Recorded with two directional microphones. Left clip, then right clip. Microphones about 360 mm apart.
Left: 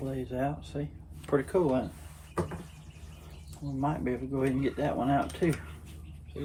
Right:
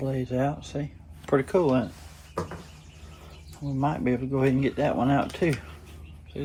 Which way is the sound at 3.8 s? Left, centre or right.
Right.